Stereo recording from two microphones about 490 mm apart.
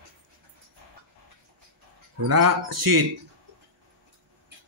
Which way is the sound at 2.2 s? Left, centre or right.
Right.